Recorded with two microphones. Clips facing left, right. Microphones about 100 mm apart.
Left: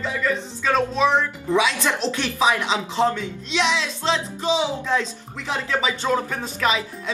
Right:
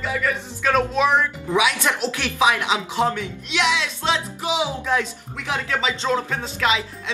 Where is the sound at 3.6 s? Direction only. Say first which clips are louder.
Right 2 dB; 30° left (ahead or behind).